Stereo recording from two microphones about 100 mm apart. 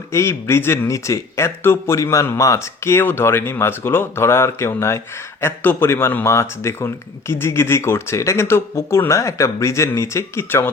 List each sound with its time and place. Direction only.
0.1 s speech: 25° left (ahead or behind)